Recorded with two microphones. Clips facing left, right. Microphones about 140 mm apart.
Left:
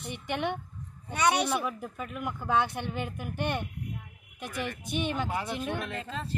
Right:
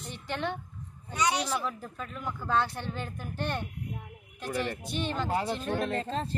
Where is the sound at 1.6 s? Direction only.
10° left (ahead or behind).